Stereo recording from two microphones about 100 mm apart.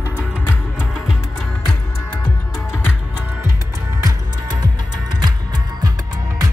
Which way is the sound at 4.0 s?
40° right (ahead or behind).